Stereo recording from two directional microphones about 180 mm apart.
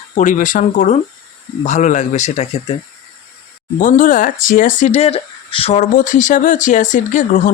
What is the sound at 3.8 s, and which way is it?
Speech, 45° left (ahead or behind).